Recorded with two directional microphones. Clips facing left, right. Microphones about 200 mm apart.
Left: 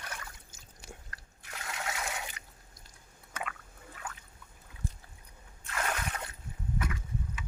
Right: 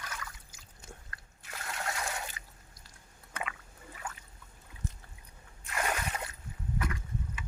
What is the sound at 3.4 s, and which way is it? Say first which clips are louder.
Rowboat: even; 5° right (ahead or behind).